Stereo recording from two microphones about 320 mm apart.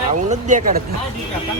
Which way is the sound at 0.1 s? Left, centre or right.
Right.